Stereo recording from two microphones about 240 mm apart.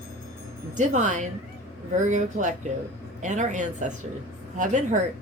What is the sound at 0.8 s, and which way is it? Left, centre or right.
A woman's voice, right.